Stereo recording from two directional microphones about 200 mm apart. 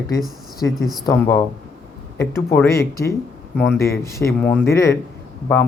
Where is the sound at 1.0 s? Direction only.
15° left (ahead or behind).